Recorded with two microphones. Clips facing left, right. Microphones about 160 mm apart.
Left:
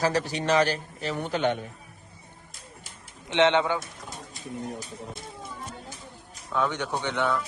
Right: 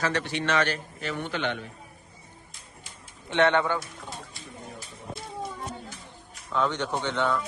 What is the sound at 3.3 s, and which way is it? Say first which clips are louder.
Speech: left 1 dB; 20° left (ahead or behind).